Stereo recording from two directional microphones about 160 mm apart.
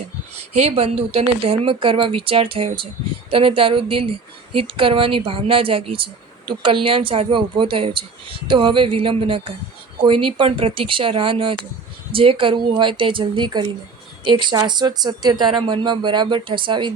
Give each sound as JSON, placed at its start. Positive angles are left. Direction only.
{"t": 0.5, "sound": "speech", "side_deg": -40}